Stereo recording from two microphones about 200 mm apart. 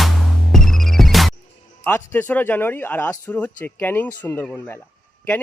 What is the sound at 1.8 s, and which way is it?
Speech, 10° left (ahead or behind).